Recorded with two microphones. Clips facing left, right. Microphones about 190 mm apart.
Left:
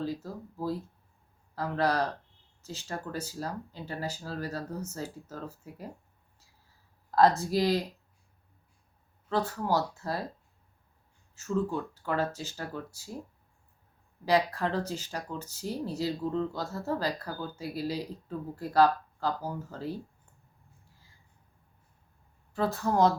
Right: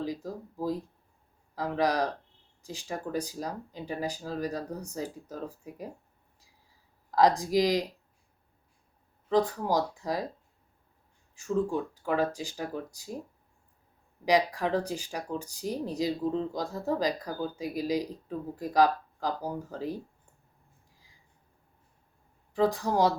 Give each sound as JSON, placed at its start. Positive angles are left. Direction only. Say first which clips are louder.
{"t": 0.0, "sound": "speech", "louder": "even", "side_deg": -15}
{"t": 7.2, "sound": "speech", "louder": "right 1 dB", "side_deg": -15}
{"t": 9.3, "sound": "speech", "louder": "right 3 dB", "side_deg": -15}
{"t": 11.3, "sound": "speech", "louder": "right 2 dB", "side_deg": -15}
{"t": 14.3, "sound": "speech", "louder": "right 1 dB", "side_deg": -15}
{"t": 22.5, "sound": "speech", "louder": "right 1 dB", "side_deg": -15}